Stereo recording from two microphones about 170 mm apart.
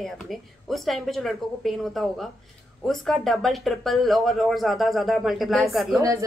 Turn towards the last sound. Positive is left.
turn(degrees=-20)  # may be behind; listen again after turning